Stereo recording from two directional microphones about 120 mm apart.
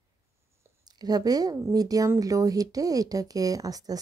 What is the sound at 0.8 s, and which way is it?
Speech, 35° right (ahead or behind).